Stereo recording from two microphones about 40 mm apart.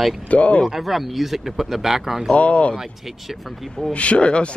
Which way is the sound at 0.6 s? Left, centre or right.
Centre.